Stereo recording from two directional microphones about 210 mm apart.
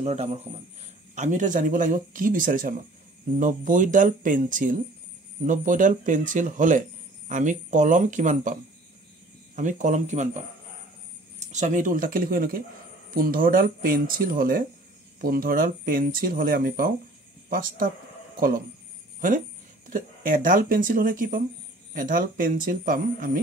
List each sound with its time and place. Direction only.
0.0 s speech: 30° right (ahead or behind)
9.6 s speech: 35° right (ahead or behind)
11.3 s speech: 35° right (ahead or behind)
19.2 s speech: 40° right (ahead or behind)